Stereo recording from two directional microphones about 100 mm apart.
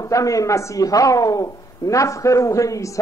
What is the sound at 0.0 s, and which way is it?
A man's voice, 35° left (ahead or behind).